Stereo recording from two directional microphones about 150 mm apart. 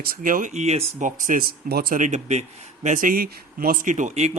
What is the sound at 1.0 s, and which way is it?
Speech, 60° right (ahead or behind).